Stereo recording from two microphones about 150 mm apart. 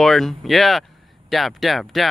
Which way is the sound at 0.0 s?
Centre (ahead or behind).